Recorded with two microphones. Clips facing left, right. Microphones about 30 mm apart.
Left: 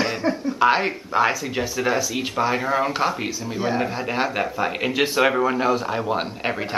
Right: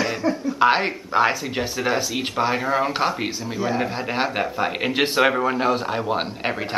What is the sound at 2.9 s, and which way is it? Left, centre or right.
Speech, centre.